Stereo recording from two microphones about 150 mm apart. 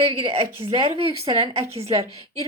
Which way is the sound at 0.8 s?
40° right (ahead or behind).